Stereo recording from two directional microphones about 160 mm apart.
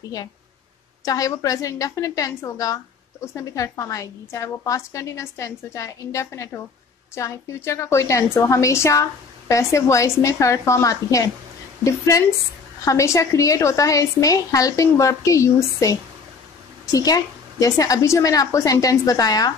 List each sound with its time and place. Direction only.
1.0 s a woman's voice: 20° left (ahead or behind)